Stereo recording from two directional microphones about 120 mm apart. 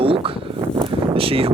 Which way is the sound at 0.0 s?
50° right (ahead or behind).